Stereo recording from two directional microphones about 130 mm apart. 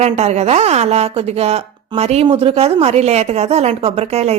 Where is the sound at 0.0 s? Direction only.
55° right (ahead or behind).